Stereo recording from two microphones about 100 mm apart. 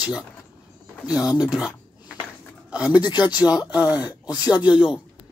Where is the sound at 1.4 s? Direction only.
10° right (ahead or behind).